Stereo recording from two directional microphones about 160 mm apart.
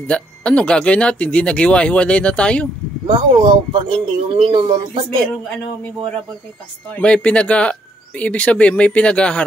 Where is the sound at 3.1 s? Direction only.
30° right (ahead or behind).